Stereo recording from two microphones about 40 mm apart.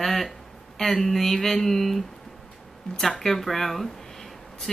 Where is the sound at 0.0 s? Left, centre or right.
Centre.